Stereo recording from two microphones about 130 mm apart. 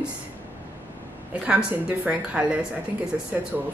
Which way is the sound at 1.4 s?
10° right (ahead or behind).